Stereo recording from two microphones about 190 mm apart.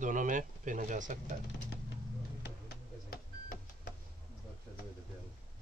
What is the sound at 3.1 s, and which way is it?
Vehicle, 50° left (ahead or behind).